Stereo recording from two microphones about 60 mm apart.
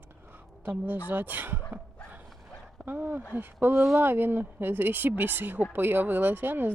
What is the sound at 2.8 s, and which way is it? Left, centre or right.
Speech, right.